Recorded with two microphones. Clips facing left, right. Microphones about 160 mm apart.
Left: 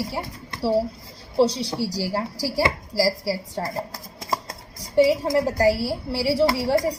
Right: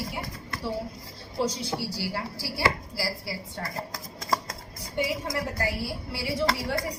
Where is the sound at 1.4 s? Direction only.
35° left (ahead or behind).